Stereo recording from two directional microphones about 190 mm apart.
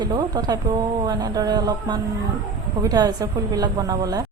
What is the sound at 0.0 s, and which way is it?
A woman's voice, 20° right (ahead or behind).